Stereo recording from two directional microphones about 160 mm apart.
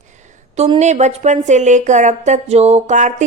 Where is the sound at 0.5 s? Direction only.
40° right (ahead or behind).